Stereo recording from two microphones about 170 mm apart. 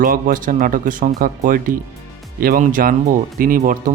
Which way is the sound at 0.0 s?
55° right (ahead or behind).